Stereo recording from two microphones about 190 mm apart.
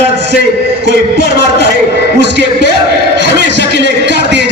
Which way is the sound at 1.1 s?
60° right (ahead or behind).